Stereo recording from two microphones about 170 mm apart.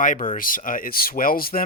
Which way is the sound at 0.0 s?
50° left (ahead or behind).